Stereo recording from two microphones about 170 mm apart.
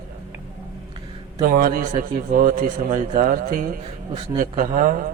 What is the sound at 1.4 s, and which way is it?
A man's voice, 55° right (ahead or behind).